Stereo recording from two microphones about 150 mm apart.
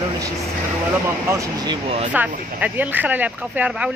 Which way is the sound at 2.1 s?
10° right (ahead or behind).